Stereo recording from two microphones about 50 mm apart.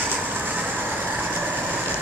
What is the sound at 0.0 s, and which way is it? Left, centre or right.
Vehicle, right.